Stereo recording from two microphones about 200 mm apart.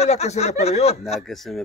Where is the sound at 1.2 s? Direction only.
Centre (ahead or behind).